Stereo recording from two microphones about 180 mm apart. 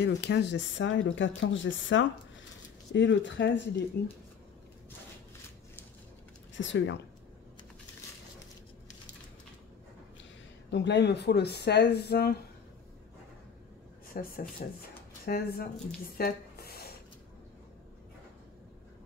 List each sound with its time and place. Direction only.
0.0 s speech: 70° left (ahead or behind)
6.5 s speech: 90° left
10.7 s speech: 75° left (ahead or behind)
14.1 s speech: 55° left (ahead or behind)
16.2 s a sound: 60° left (ahead or behind)